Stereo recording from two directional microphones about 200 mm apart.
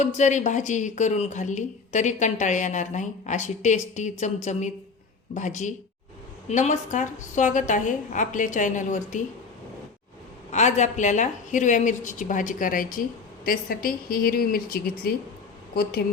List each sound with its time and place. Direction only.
0.0 s speech: 35° left (ahead or behind)
10.5 s speech: 35° left (ahead or behind); by 16.0 s 50° left (ahead or behind)